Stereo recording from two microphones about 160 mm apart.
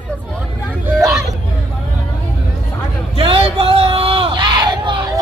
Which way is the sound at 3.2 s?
35° right (ahead or behind).